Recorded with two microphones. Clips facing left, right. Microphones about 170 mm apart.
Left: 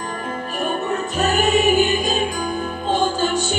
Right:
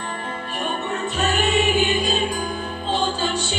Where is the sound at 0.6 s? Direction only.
40° left (ahead or behind).